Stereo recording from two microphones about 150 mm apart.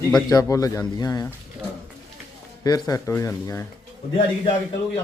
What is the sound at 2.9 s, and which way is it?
Speech, 20° left (ahead or behind).